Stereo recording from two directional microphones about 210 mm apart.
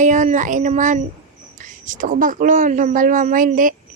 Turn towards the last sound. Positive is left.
turn(degrees=-40)  # may be behind; listen again after turning